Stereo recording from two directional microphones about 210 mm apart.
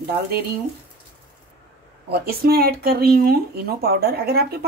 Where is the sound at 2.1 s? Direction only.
45° right (ahead or behind).